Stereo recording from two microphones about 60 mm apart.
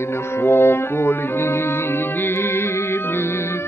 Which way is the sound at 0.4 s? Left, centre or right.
Left.